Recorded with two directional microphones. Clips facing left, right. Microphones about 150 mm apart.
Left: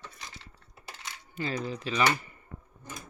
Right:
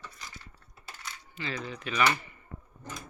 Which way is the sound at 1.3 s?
45° left (ahead or behind).